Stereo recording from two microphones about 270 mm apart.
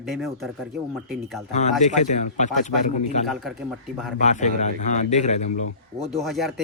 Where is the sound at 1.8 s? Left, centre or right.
Left.